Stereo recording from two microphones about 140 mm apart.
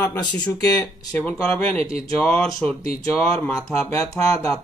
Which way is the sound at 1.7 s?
45° right (ahead or behind).